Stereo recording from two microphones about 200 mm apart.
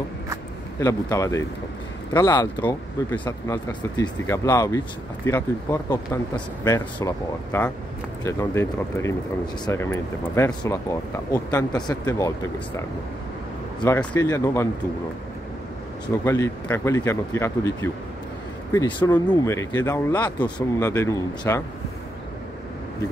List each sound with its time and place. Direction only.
0.7 s speech: 15° left (ahead or behind)
16.3 s speech: 15° left (ahead or behind)